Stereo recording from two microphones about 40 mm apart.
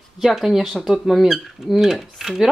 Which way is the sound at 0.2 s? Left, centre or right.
Centre.